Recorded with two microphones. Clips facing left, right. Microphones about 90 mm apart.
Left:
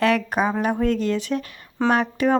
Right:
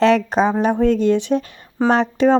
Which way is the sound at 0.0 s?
25° right (ahead or behind).